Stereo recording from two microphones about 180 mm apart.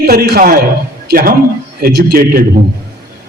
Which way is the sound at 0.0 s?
55° right (ahead or behind).